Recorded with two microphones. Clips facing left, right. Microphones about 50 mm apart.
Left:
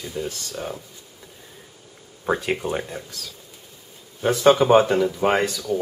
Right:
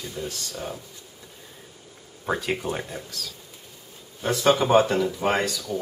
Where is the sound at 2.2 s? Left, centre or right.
Centre.